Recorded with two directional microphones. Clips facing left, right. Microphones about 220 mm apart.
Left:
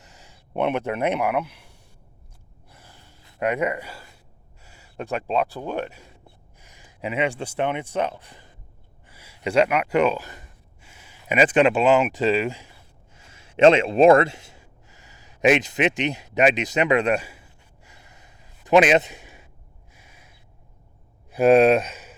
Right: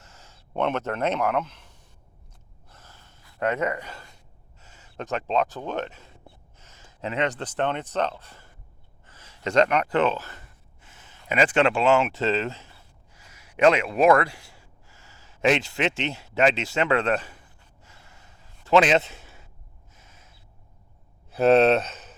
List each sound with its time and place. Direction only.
0.0 s speech: 15° left (ahead or behind)
2.6 s gasp: 10° left (ahead or behind)
4.6 s speech: 10° left (ahead or behind)
13.1 s gasp: 25° left (ahead or behind)
21.2 s speech: 10° left (ahead or behind)